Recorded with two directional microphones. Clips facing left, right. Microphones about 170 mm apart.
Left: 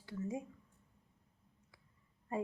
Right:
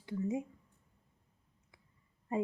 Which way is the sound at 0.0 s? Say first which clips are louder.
Right 5 dB; 20° right (ahead or behind).